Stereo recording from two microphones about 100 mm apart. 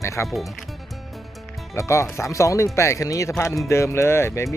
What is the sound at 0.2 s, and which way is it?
Speech, 25° left (ahead or behind).